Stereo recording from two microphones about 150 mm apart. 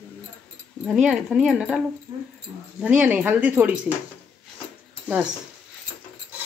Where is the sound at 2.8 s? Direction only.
10° right (ahead or behind).